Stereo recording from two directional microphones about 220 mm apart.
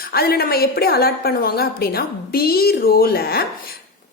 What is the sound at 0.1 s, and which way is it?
A woman's voice, 45° left (ahead or behind).